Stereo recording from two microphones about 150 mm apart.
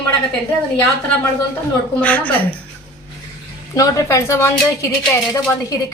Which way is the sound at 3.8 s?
20° left (ahead or behind).